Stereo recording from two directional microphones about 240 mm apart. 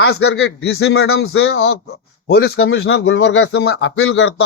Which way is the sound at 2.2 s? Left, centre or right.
Left.